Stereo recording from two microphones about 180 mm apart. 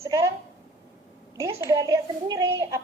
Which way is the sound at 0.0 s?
15° right (ahead or behind).